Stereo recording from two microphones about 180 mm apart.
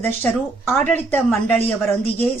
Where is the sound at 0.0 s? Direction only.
10° left (ahead or behind).